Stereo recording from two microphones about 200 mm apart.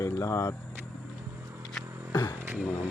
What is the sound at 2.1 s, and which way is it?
Beatboxing, 20° left (ahead or behind).